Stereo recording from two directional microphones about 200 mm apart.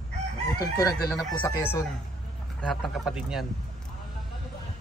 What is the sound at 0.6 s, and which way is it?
Speech, 15° left (ahead or behind).